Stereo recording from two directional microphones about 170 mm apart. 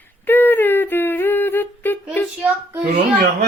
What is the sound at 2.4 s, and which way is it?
Speech, 10° right (ahead or behind).